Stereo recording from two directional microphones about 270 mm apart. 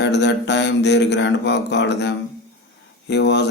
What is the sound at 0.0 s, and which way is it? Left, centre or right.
A man's voice, left.